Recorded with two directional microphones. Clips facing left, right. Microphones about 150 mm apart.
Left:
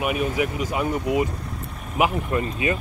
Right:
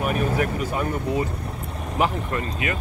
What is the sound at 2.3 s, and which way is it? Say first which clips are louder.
Speech: left 3 dB; 25° left (ahead or behind).